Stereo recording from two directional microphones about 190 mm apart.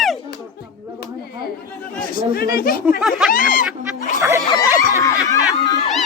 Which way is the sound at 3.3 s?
45° left (ahead or behind).